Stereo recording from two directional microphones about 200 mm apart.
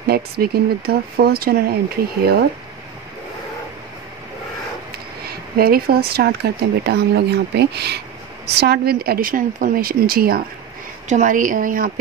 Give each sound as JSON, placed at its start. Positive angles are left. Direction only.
{"t": 0.0, "sound": "speech", "side_deg": -50}
{"t": 5.2, "sound": "a woman's voice", "side_deg": -50}